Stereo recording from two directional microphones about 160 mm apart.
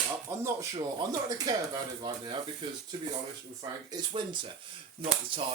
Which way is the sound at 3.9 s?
30° right (ahead or behind).